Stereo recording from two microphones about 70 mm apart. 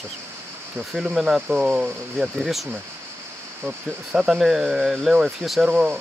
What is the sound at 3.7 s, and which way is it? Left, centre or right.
Speech, centre.